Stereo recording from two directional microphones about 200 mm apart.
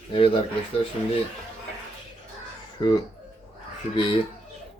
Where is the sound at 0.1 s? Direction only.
25° left (ahead or behind).